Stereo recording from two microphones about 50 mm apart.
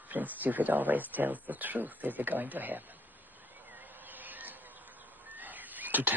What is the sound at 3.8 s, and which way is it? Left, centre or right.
Insect, right.